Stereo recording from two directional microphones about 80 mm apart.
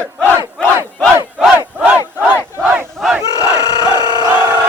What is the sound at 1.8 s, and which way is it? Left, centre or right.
Battle cry, centre.